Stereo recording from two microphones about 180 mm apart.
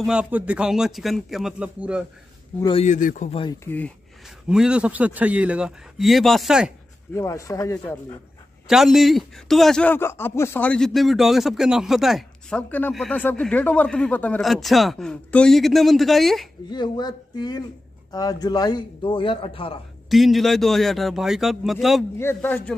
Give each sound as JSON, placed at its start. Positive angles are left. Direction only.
{"t": 0.0, "sound": "a man's voice", "side_deg": -5}
{"t": 2.8, "sound": "a man's voice", "side_deg": 45}
{"t": 3.3, "sound": "a man's voice", "side_deg": 30}
{"t": 3.6, "sound": "speech", "side_deg": 10}
{"t": 4.5, "sound": "a man's voice", "side_deg": -5}
{"t": 7.2, "sound": "speech", "side_deg": 15}
{"t": 8.6, "sound": "a man's voice", "side_deg": 0}
{"t": 16.6, "sound": "a man's voice", "side_deg": 25}
{"t": 20.1, "sound": "a man's voice", "side_deg": 0}
{"t": 22.2, "sound": "speech", "side_deg": 10}